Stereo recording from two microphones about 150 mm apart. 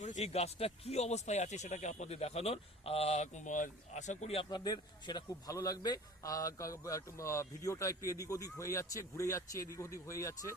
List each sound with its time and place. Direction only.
0.0 s speech: 50° left (ahead or behind)
4.4 s a man's voice: 25° left (ahead or behind)